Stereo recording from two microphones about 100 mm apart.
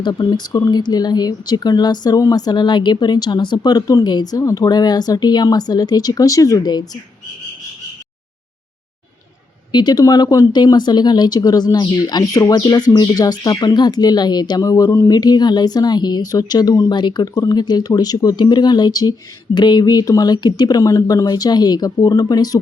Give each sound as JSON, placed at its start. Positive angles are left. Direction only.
{"t": 0.0, "sound": "speech", "side_deg": 45}
{"t": 9.7, "sound": "speech", "side_deg": 40}